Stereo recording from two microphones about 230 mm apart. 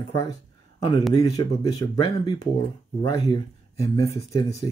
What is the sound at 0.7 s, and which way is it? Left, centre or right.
A man's voice, left.